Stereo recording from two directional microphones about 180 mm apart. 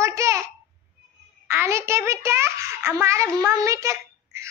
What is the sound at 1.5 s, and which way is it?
A child's voice, 15° right (ahead or behind).